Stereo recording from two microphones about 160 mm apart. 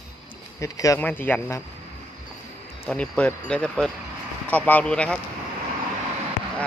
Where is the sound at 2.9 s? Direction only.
10° left (ahead or behind).